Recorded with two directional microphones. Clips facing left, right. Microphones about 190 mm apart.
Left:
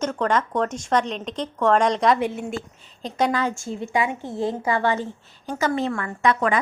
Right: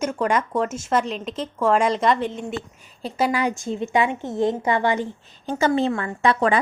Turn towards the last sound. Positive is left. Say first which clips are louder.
# right 2 dB
turn(degrees=-30)  # may be behind; listen again after turning